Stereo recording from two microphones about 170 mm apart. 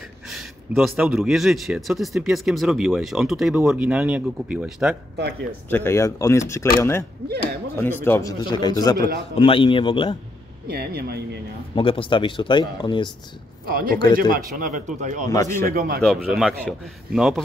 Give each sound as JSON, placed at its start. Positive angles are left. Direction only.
{"t": 0.3, "sound": "a man's voice", "side_deg": 0}
{"t": 5.7, "sound": "speech", "side_deg": 15}
{"t": 10.7, "sound": "speech", "side_deg": -65}
{"t": 11.7, "sound": "speech", "side_deg": 30}
{"t": 13.7, "sound": "speech", "side_deg": -60}
{"t": 14.3, "sound": "speech", "side_deg": -50}
{"t": 15.3, "sound": "speech", "side_deg": 15}
{"t": 15.6, "sound": "speech", "side_deg": -60}
{"t": 16.0, "sound": "a man's voice", "side_deg": 0}